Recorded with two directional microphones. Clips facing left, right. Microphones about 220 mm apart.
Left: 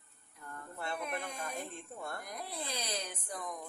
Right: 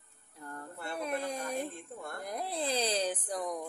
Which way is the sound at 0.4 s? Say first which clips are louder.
Right 1 dB; 35° right (ahead or behind).